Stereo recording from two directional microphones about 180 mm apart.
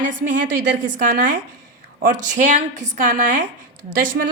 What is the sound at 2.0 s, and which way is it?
A woman's voice, 45° right (ahead or behind).